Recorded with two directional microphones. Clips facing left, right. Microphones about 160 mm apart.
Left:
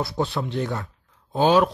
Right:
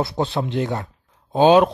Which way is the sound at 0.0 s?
20° right (ahead or behind).